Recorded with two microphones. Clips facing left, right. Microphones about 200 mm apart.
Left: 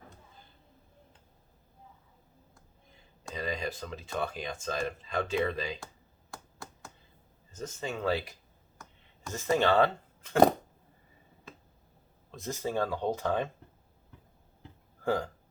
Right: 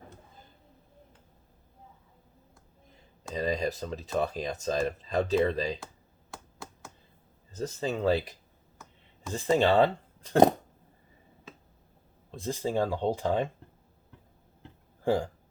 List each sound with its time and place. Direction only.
3.3 s speech: 40° right (ahead or behind)
6.3 s finger snapping: centre (ahead or behind)
7.5 s speech: 35° right (ahead or behind)
9.5 s speech: 15° right (ahead or behind)
12.4 s speech: 30° right (ahead or behind)
12.6 s speech: 15° right (ahead or behind)
15.0 s speech: 15° right (ahead or behind)